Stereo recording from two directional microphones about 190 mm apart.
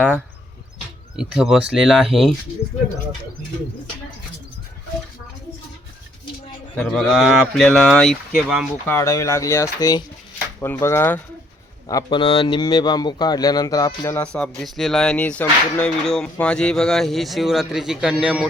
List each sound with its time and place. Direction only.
1.1 s speech: 5° right (ahead or behind)
6.7 s speech: centre (ahead or behind)
8.9 s speech: 15° left (ahead or behind)
12.0 s speech: 30° left (ahead or behind); by 18.4 s 5° right (ahead or behind)